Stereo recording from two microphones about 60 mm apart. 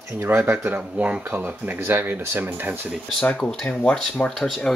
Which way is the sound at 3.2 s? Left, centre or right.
Left.